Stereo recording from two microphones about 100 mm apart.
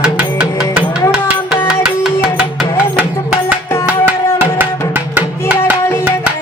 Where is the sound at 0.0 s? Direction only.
10° right (ahead or behind).